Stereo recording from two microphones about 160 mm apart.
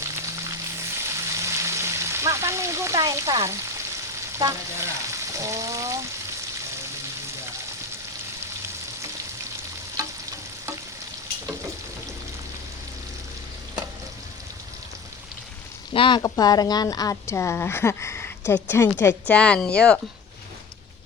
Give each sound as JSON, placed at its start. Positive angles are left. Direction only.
{"t": 0.0, "sound": "frying", "side_deg": -15}
{"t": 10.0, "sound": "stir", "side_deg": -20}
{"t": 15.9, "sound": "speech", "side_deg": 30}
{"t": 16.2, "sound": "speech", "side_deg": 20}